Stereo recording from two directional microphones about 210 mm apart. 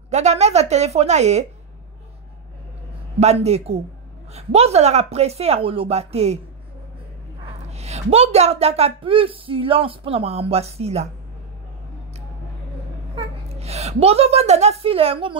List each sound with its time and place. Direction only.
0.1 s a woman's voice: 30° right (ahead or behind)
3.2 s a woman's voice: 30° right (ahead or behind)
7.4 s a woman's voice: 30° right (ahead or behind)
13.1 s a child's voice: 30° right (ahead or behind)